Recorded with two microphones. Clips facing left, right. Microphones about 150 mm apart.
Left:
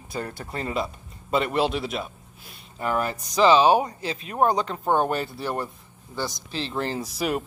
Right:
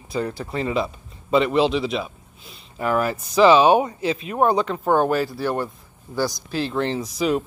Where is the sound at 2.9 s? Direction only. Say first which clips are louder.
Right 4 dB; 5° right (ahead or behind).